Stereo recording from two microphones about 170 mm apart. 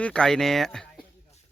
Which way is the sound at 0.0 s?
5° left (ahead or behind).